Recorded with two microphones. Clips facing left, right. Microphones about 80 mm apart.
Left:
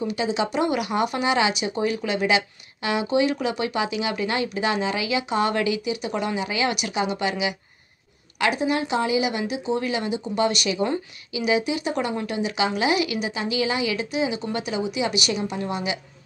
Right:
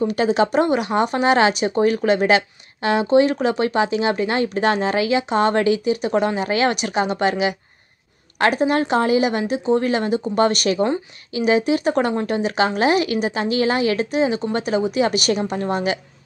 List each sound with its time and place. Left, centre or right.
0.0 s speech: right